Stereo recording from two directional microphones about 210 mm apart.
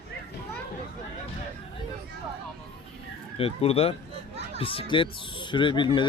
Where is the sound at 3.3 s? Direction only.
30° left (ahead or behind).